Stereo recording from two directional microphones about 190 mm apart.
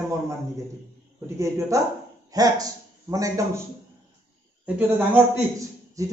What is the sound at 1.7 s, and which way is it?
A man's voice, 15° right (ahead or behind).